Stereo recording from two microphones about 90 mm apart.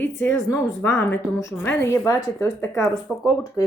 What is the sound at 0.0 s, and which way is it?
Speech, 25° left (ahead or behind).